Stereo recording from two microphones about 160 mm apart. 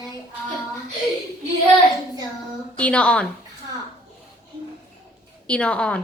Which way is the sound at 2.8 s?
10° left (ahead or behind).